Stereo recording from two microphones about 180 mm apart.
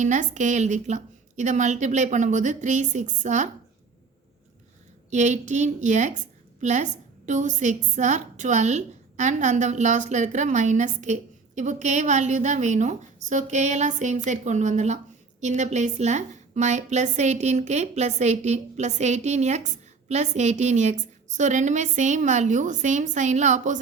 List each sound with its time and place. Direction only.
0.0 s a woman's voice: 45° right (ahead or behind)
5.1 s a woman's voice: 40° right (ahead or behind)